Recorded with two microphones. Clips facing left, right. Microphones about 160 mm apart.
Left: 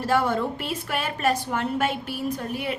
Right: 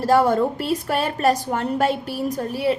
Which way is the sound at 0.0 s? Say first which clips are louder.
Right 6 dB; 40° right (ahead or behind).